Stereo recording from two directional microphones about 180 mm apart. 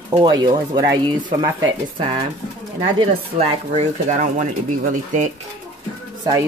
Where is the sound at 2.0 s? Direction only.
30° right (ahead or behind).